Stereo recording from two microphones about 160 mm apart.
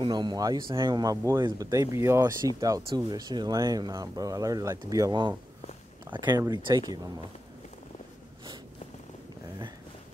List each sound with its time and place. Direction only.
0.0 s speech: 30° right (ahead or behind)